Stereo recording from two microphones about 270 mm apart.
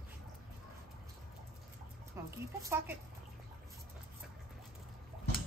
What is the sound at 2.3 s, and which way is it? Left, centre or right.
Speech, centre.